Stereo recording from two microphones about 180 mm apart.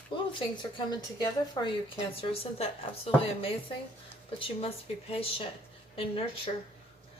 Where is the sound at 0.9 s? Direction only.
20° left (ahead or behind).